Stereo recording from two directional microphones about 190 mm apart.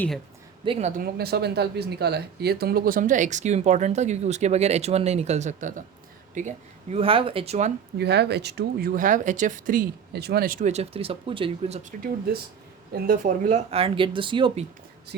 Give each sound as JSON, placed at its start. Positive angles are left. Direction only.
{"t": 0.6, "sound": "speech", "side_deg": -30}
{"t": 1.0, "sound": "speech", "side_deg": -55}
{"t": 6.9, "sound": "speech", "side_deg": -30}
{"t": 7.9, "sound": "speech", "side_deg": -60}